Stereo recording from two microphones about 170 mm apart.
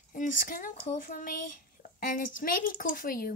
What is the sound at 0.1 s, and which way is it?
Speech, 50° left (ahead or behind).